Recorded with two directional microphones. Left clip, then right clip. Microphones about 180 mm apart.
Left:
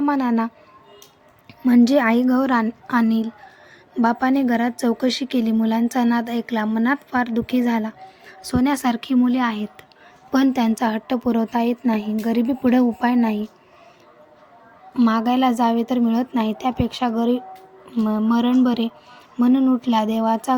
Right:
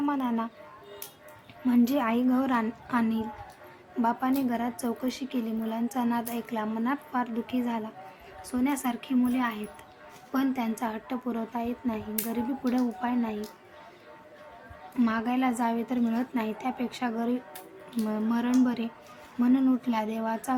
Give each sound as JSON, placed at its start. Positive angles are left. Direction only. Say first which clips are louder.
{"t": 0.0, "sound": "speech", "louder": "left 9 dB", "side_deg": 40}
{"t": 1.6, "sound": "speech", "louder": "left 10 dB", "side_deg": 40}
{"t": 14.9, "sound": "speech", "louder": "left 9 dB", "side_deg": 30}